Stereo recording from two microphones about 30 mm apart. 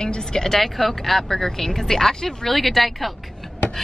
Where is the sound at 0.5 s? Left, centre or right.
Centre.